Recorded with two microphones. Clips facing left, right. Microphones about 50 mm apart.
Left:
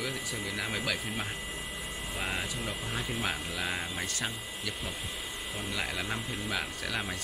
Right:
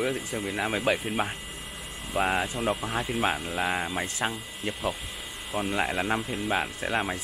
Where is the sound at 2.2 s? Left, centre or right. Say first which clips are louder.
Right 9 dB; right.